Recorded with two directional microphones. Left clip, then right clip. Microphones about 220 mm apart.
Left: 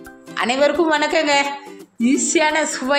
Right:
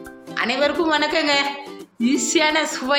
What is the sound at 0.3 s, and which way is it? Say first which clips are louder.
A woman's voice: left 3 dB; 20° left (ahead or behind).